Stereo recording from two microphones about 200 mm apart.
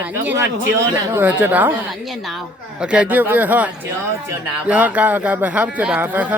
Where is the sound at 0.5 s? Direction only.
70° right (ahead or behind).